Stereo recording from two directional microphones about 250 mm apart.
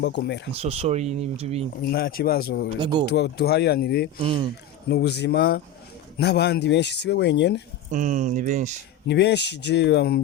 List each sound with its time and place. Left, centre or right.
0.0 s speech: left
0.6 s speech: right
1.8 s speech: left
2.7 s speech: right
3.1 s speech: left
4.2 s speech: right
4.9 s speech: left
7.9 s speech: right
9.0 s speech: left